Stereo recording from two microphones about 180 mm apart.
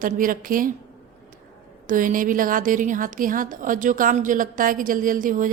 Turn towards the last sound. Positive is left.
turn(degrees=-50)  # may be behind; listen again after turning